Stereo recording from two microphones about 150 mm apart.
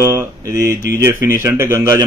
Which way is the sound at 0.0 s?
15° right (ahead or behind).